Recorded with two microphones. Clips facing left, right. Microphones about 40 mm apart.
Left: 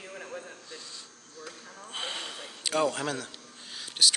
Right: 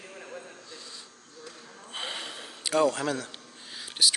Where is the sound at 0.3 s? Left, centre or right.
Centre.